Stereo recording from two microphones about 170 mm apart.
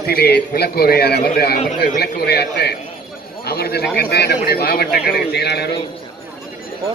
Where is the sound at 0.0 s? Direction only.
65° left (ahead or behind).